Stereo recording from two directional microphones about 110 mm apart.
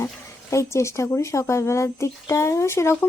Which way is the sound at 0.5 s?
25° left (ahead or behind).